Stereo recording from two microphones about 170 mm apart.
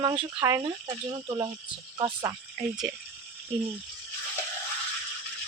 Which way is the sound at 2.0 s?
25° right (ahead or behind).